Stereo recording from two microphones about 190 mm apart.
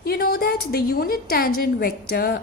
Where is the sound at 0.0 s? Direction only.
55° left (ahead or behind).